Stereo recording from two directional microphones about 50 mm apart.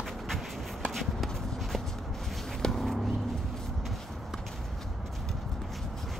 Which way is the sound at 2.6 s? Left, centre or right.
Centre.